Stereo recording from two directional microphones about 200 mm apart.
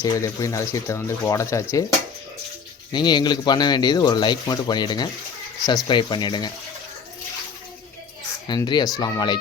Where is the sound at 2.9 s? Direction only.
20° left (ahead or behind).